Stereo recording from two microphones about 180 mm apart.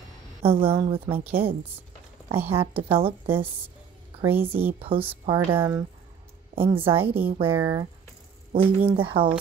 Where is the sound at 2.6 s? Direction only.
30° right (ahead or behind).